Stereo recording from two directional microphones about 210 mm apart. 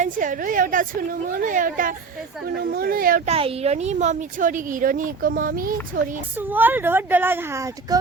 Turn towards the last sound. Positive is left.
turn(degrees=-15)  # may be behind; listen again after turning